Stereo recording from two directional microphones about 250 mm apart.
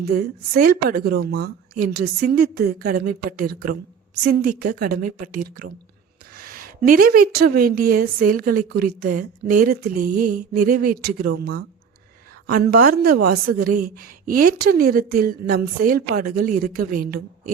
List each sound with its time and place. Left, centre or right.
0.0 s a woman's voice: right